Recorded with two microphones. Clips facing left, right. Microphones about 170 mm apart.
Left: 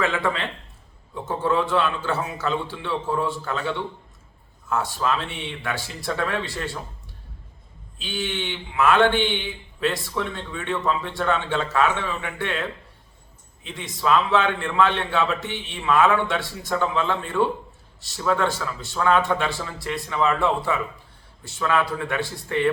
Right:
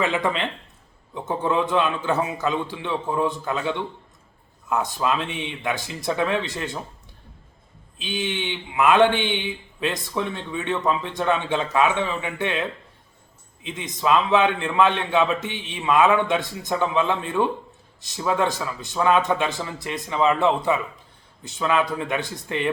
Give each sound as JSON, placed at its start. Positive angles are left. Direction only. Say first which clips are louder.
{"t": 0.0, "sound": "a man's voice", "louder": "right 1 dB", "side_deg": -20}
{"t": 7.9, "sound": "a man's voice", "louder": "right 1 dB", "side_deg": -20}